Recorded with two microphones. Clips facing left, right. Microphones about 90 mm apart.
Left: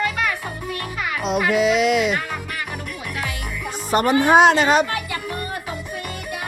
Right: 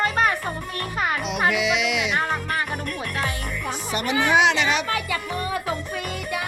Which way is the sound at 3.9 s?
45° left (ahead or behind).